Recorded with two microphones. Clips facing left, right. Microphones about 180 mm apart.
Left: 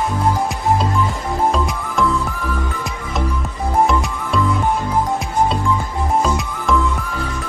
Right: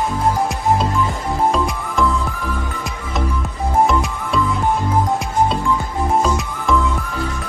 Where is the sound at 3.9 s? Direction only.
Centre (ahead or behind).